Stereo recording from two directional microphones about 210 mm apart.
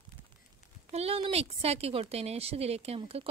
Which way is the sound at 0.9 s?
30° right (ahead or behind).